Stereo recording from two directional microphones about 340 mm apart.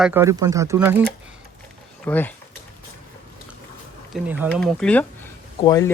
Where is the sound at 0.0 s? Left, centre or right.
Centre.